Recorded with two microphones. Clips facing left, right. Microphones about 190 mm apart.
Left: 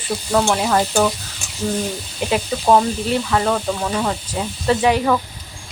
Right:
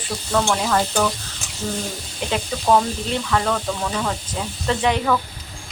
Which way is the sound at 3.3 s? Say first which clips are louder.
Left 1 dB; 10° left (ahead or behind).